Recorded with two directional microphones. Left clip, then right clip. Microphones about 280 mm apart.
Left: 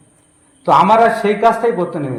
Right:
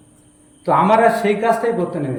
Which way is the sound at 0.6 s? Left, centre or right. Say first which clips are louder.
Left 3 dB; centre.